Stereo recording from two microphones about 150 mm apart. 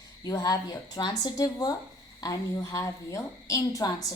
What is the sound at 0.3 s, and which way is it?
A woman's voice, 25° left (ahead or behind).